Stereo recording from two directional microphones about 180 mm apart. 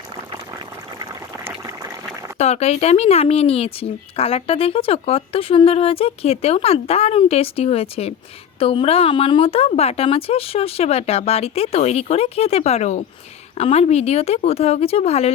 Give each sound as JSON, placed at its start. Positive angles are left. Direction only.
{"t": 2.4, "sound": "speech", "side_deg": 35}